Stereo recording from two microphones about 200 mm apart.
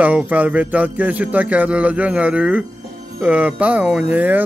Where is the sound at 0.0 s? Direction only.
10° right (ahead or behind).